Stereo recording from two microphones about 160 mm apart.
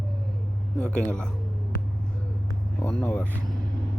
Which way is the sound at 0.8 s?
5° left (ahead or behind).